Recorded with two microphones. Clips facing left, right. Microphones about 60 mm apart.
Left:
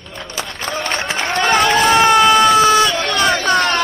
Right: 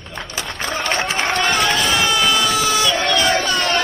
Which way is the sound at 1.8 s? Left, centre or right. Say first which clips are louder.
Left 7 dB; left.